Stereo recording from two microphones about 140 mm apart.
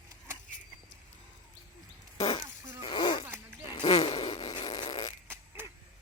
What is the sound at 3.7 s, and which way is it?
Fart, 35° left (ahead or behind).